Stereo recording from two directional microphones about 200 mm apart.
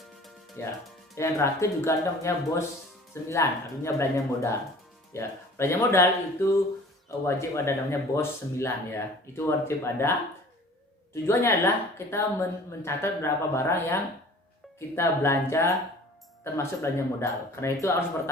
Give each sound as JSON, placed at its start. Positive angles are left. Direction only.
{"t": 0.6, "sound": "speech", "side_deg": 15}